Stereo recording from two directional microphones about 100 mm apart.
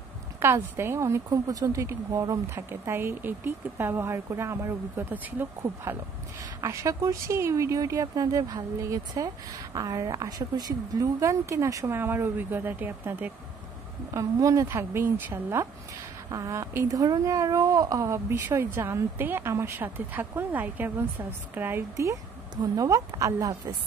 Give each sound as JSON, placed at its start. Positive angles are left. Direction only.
{"t": 0.4, "sound": "a woman's voice", "side_deg": -25}
{"t": 14.1, "sound": "a woman's voice", "side_deg": -30}
{"t": 16.3, "sound": "a woman's voice", "side_deg": -35}
{"t": 21.9, "sound": "speech", "side_deg": -35}